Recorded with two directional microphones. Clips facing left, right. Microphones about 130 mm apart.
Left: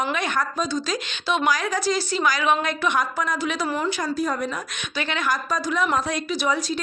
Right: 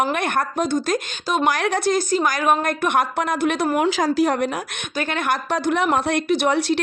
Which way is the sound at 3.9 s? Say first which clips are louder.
Right 6 dB; 90° right.